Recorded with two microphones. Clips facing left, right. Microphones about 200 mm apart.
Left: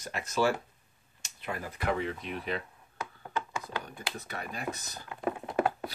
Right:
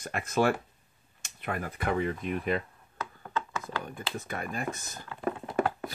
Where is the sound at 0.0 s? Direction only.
55° right (ahead or behind).